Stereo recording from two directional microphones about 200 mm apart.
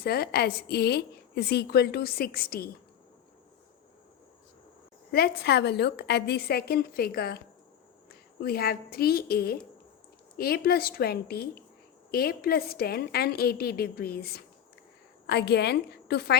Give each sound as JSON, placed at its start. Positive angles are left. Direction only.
{"t": 0.0, "sound": "a woman's voice", "side_deg": 50}
{"t": 5.1, "sound": "a woman's voice", "side_deg": 50}